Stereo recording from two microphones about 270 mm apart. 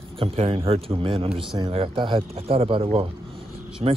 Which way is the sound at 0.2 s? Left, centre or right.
Right.